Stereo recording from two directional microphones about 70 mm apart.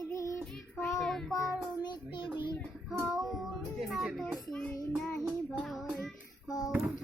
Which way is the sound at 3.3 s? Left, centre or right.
Centre.